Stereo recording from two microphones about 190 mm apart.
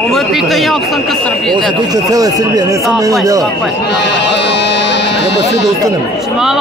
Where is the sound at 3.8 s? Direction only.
65° left (ahead or behind).